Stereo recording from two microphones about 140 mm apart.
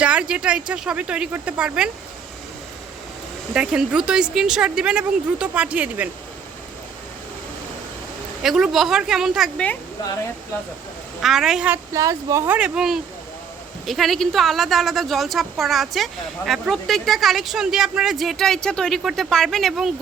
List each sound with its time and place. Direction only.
0.0 s a woman's voice: 10° right (ahead or behind)
3.5 s a woman's voice: 5° right (ahead or behind)
8.4 s speech: 5° right (ahead or behind)
11.2 s speech: centre (ahead or behind)
11.9 s speech: 25° right (ahead or behind)
12.5 s a woman's voice: 5° right (ahead or behind)